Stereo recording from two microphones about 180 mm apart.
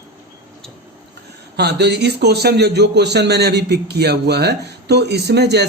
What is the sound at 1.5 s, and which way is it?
A man's voice, 70° right (ahead or behind).